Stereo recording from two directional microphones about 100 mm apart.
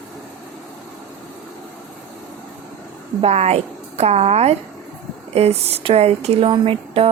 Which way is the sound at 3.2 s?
90° right.